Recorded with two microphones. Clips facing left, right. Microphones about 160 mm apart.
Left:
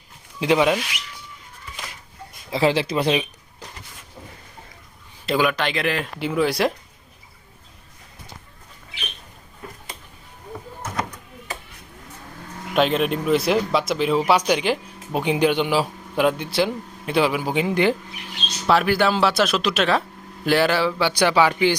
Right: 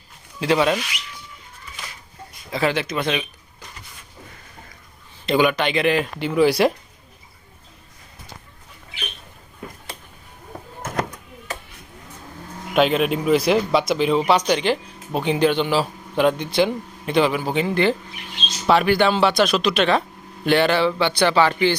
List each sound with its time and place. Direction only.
0.3 s speech: 15° left (ahead or behind)
2.5 s speech: 25° left (ahead or behind)
5.2 s speech: centre (ahead or behind)
12.7 s speech: centre (ahead or behind)
18.6 s speech: centre (ahead or behind)